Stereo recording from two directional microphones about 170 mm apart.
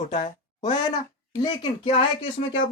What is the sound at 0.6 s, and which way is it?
Speech, 25° left (ahead or behind).